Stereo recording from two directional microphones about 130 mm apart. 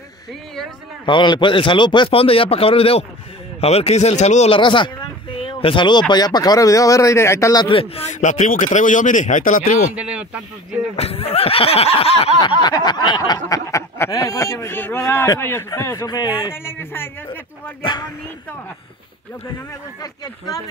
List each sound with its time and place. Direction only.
1.0 s speech: 35° left (ahead or behind); by 4.5 s 60° left (ahead or behind)
4.5 s speech: 40° left (ahead or behind); by 7.6 s 25° left (ahead or behind)
7.6 s speech: 45° left (ahead or behind)
8.1 s speech: 70° left (ahead or behind)
9.9 s speech: 10° right (ahead or behind)
11.0 s speech: 50° left (ahead or behind)
12.4 s a sound: 35° left (ahead or behind)
16.4 s a man's voice: 20° left (ahead or behind)
17.8 s speech: 35° left (ahead or behind)
20.0 s a sound: 30° left (ahead or behind)